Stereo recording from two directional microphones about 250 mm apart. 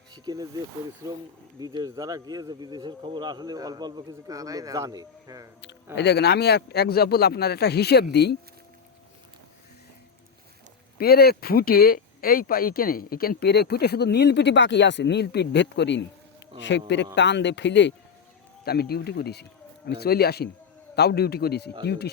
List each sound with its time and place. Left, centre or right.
0.3 s speech: centre
5.6 s speech: left
10.9 s speech: left